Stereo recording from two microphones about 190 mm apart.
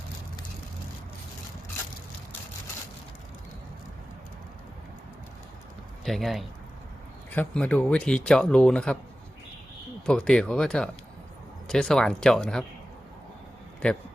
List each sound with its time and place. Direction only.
6.1 s speech: centre (ahead or behind)
10.1 s speech: 5° left (ahead or behind)
13.8 s speech: 5° left (ahead or behind)